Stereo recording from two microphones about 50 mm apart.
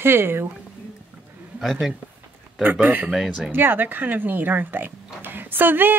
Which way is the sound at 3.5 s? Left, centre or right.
Right.